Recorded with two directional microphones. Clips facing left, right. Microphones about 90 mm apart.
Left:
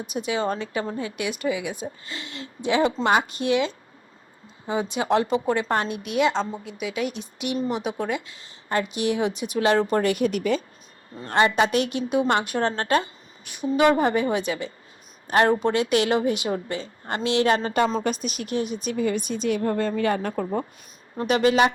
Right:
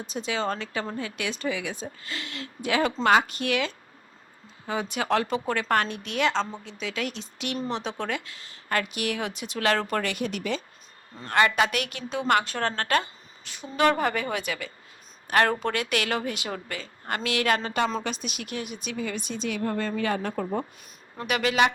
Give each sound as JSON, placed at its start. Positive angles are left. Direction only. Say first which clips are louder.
{"t": 0.0, "sound": "a woman's voice", "louder": "left 3 dB", "side_deg": 15}
{"t": 18.0, "sound": "speech", "louder": "left 6 dB", "side_deg": 45}
{"t": 20.1, "sound": "speech", "louder": "left 2 dB", "side_deg": 15}
{"t": 21.2, "sound": "speech", "louder": "left 4 dB", "side_deg": 30}